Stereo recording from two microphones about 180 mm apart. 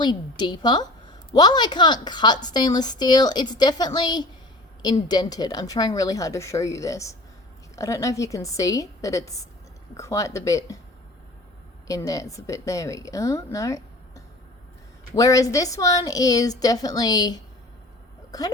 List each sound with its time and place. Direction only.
0.0 s a woman's voice: 25° left (ahead or behind)
11.9 s speech: 20° left (ahead or behind)
15.1 s a woman's voice: 20° left (ahead or behind)